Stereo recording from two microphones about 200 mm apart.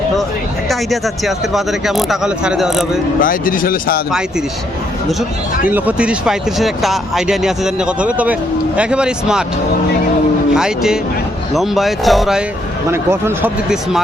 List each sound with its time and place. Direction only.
0.7 s speech: centre (ahead or behind)
3.2 s speech: 45° left (ahead or behind)
5.6 s speech: 10° right (ahead or behind)
10.5 s speech: 5° right (ahead or behind)
12.9 s speech: 10° right (ahead or behind)